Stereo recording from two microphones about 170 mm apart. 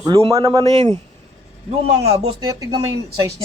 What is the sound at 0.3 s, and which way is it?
Speech, 20° right (ahead or behind).